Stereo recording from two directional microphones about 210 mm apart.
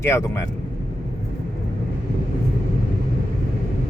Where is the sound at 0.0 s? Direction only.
15° left (ahead or behind).